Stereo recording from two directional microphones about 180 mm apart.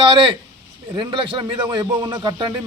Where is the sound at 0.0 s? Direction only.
25° right (ahead or behind).